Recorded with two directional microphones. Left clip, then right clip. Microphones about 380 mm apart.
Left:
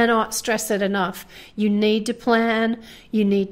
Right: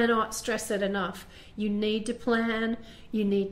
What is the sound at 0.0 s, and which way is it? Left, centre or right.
A woman's voice, left.